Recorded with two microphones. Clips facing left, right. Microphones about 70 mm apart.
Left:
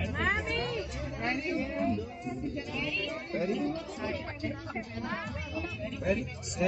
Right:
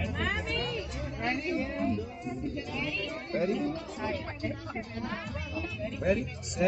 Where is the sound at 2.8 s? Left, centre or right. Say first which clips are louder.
Even; right.